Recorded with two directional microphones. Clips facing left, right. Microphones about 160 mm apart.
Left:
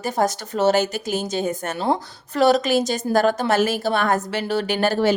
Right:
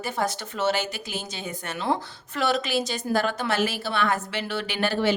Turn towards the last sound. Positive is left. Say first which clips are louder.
# left 5 dB
turn(degrees=40)  # may be behind; listen again after turning